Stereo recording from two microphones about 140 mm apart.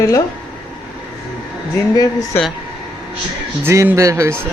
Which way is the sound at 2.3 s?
15° left (ahead or behind).